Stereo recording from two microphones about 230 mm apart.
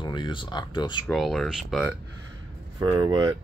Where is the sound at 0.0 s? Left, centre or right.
Left.